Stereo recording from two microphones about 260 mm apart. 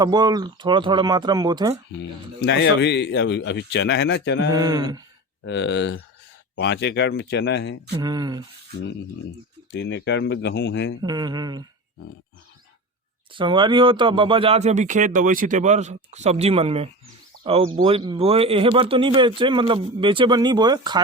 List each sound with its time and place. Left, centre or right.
0.0 s speech: centre
2.0 s speech: left
4.5 s speech: centre
5.5 s speech: left
8.0 s speech: centre
9.7 s speech: left
11.0 s speech: centre
13.3 s speech: centre